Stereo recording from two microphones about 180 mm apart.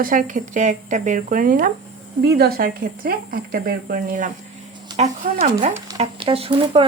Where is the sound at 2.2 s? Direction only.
65° right (ahead or behind); by 4.3 s 50° right (ahead or behind).